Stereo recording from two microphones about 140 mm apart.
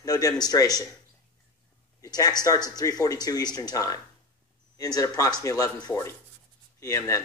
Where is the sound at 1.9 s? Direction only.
25° left (ahead or behind).